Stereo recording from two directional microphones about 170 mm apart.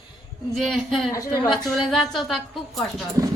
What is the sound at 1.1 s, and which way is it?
Speech, 20° left (ahead or behind).